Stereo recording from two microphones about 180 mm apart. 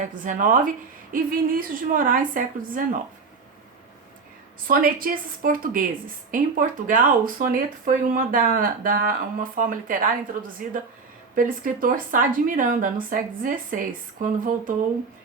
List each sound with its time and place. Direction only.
0.0 s speech: 45° right (ahead or behind)
4.7 s speech: 50° right (ahead or behind)